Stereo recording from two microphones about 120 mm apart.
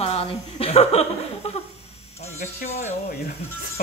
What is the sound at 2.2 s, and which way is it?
Speech, 75° left (ahead or behind).